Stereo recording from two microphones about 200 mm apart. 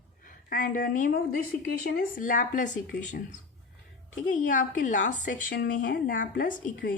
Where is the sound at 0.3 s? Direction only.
45° left (ahead or behind).